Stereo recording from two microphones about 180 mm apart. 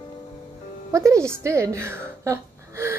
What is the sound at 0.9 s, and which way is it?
A woman's voice, 15° right (ahead or behind).